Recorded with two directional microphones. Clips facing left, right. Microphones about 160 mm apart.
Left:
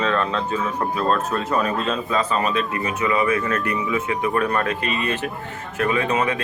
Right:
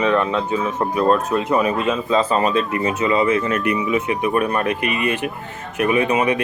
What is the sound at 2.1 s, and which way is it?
Speech, 35° right (ahead or behind).